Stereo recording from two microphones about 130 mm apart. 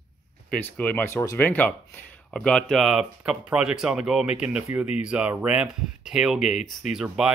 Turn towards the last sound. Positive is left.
turn(degrees=-5)  # may be behind; listen again after turning